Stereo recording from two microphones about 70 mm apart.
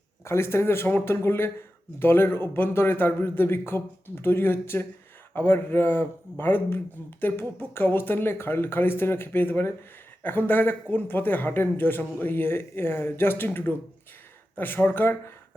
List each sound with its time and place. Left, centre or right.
0.3 s a man's voice: left